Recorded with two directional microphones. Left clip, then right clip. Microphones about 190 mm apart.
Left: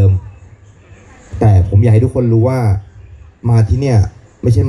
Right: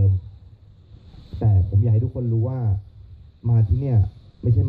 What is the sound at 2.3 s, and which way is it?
Speech, 40° left (ahead or behind).